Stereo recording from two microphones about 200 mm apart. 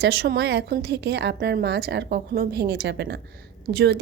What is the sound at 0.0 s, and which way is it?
A woman's voice, 50° right (ahead or behind).